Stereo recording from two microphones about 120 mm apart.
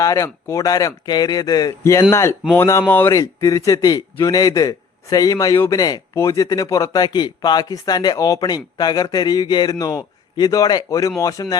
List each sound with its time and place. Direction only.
0.0 s a man's voice: 25° left (ahead or behind)
3.1 s a man's voice: 30° left (ahead or behind)